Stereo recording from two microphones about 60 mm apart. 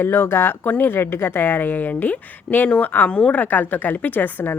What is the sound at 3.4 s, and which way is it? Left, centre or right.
A woman's voice, left.